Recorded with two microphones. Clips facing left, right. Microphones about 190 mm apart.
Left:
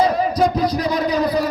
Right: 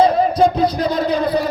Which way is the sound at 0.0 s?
30° right (ahead or behind).